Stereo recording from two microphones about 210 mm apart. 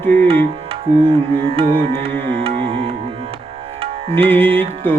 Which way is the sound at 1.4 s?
25° right (ahead or behind).